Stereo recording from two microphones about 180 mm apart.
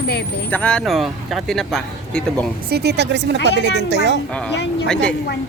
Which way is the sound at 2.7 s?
65° right (ahead or behind).